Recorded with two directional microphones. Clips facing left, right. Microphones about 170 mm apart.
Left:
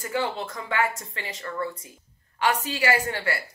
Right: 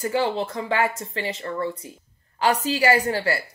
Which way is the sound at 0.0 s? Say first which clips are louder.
Right 5 dB; 35° right (ahead or behind).